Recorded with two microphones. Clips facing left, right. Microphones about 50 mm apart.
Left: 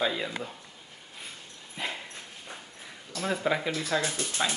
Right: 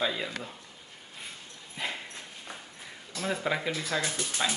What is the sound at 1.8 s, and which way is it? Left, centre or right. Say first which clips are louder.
Dog: even; centre.